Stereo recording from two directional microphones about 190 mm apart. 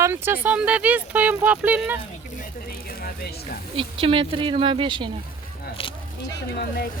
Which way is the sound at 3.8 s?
30° right (ahead or behind).